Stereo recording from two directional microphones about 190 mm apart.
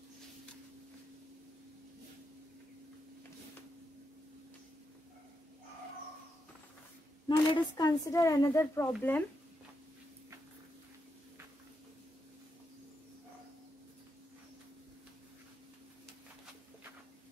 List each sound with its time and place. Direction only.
7.2 s a woman's voice: 20° left (ahead or behind)